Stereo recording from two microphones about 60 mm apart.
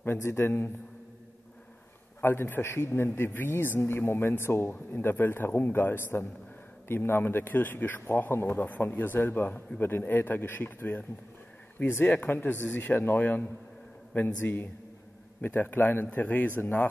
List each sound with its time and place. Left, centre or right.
0.2 s a man's voice: left
2.2 s a man's voice: left